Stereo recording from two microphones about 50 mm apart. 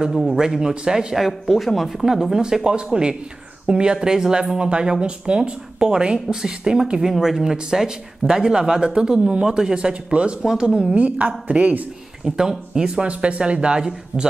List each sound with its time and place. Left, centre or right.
0.1 s speech: centre
0.4 s speech: centre
11.0 s speech: right
12.4 s speech: centre